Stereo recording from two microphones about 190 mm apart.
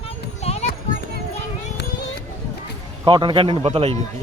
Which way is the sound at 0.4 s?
35° left (ahead or behind).